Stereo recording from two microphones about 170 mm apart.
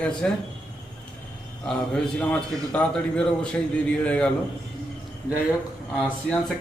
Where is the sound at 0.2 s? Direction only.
5° left (ahead or behind).